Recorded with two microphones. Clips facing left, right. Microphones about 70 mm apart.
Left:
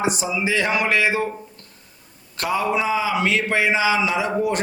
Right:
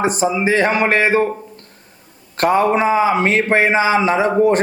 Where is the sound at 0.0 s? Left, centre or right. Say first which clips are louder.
Right 6 dB; right.